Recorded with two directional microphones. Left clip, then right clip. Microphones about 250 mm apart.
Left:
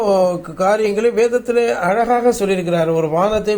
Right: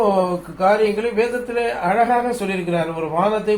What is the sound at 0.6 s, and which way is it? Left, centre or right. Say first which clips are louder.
A man's voice: left 2 dB; left.